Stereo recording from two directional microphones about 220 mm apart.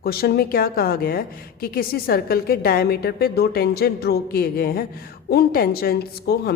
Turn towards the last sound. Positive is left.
turn(degrees=45)  # may be behind; listen again after turning